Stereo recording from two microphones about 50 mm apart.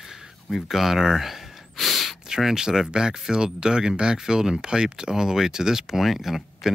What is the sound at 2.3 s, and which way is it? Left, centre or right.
Speech, centre.